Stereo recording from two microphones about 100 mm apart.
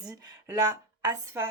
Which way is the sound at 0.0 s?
40° right (ahead or behind).